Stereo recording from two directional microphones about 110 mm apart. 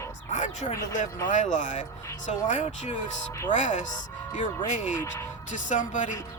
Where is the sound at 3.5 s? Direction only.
90° left.